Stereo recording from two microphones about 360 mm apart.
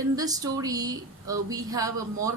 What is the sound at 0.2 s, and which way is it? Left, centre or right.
A woman's voice, centre.